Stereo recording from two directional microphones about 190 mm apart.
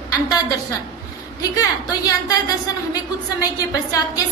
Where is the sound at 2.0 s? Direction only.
20° left (ahead or behind).